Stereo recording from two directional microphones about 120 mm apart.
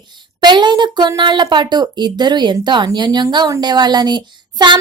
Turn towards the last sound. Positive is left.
turn(degrees=-40)  # may be behind; listen again after turning